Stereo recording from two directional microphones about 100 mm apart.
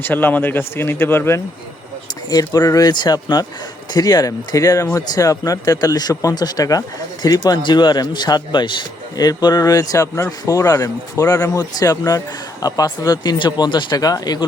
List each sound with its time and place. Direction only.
0.0 s speech: 20° left (ahead or behind)
2.3 s speech: 40° left (ahead or behind)
13.9 s speech: 35° left (ahead or behind)